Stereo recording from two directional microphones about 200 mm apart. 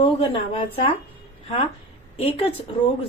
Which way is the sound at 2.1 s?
30° left (ahead or behind).